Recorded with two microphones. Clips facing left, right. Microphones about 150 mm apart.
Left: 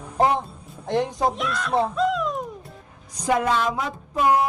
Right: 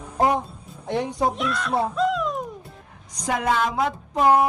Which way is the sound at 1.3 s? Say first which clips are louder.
Left 1 dB; centre (ahead or behind).